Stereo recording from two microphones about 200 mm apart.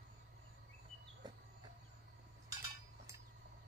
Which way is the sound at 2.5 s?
15° right (ahead or behind).